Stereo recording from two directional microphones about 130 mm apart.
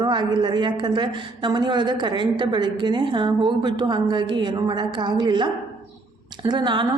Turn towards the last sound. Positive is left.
turn(degrees=-35)  # may be behind; listen again after turning